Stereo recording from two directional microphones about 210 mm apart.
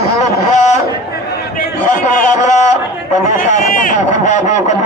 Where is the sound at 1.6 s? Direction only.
40° left (ahead or behind).